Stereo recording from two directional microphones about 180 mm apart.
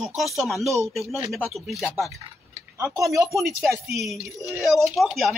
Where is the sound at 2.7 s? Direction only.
15° right (ahead or behind).